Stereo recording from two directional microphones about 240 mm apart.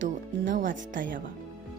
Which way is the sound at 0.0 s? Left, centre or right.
Right.